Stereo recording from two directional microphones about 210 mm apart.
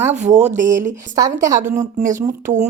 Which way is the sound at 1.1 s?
15° right (ahead or behind).